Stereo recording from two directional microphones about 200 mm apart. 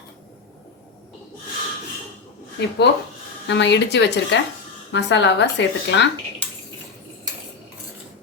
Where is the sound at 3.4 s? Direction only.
60° left (ahead or behind).